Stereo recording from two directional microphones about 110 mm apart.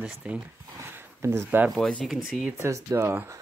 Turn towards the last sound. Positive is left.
turn(degrees=-25)  # may be behind; listen again after turning